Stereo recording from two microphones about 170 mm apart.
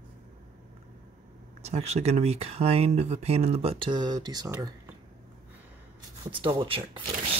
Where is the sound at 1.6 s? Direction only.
40° right (ahead or behind); by 4.7 s 20° right (ahead or behind).